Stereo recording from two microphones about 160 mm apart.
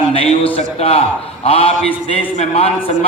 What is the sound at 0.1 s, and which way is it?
A man's voice, 35° left (ahead or behind).